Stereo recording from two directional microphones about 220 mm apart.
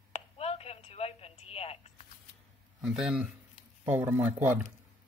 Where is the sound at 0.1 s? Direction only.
25° left (ahead or behind).